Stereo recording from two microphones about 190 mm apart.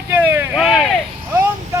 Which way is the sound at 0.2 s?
10° right (ahead or behind).